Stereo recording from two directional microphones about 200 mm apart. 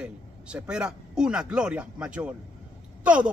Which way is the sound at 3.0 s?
5° right (ahead or behind).